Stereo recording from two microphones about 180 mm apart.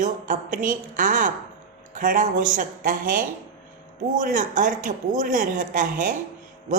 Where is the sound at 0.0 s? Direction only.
50° right (ahead or behind).